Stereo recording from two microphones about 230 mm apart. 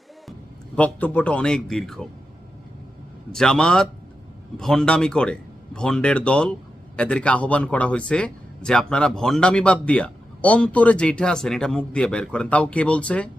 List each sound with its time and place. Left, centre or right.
0.8 s speech: centre
3.3 s speech: centre